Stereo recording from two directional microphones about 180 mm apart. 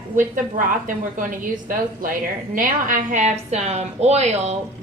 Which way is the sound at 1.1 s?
50° right (ahead or behind).